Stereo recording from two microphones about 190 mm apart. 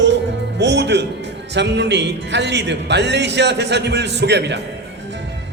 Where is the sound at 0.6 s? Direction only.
65° right (ahead or behind).